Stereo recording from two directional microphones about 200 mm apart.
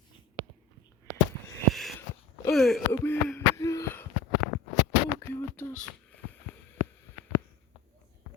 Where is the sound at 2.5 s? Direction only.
Centre (ahead or behind).